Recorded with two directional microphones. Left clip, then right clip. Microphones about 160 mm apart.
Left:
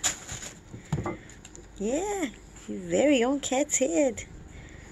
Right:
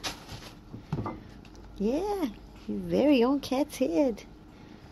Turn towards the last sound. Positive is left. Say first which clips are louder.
# left 2 dB
turn(degrees=-25)  # may be behind; listen again after turning